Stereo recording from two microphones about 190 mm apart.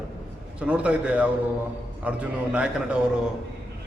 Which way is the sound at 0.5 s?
5° right (ahead or behind).